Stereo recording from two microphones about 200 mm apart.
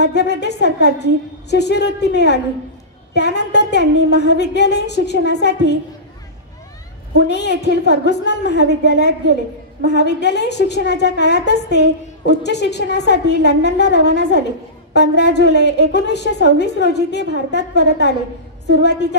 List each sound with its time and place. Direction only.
0.0 s a woman's voice: 60° left (ahead or behind)
7.2 s a woman's voice: 60° left (ahead or behind)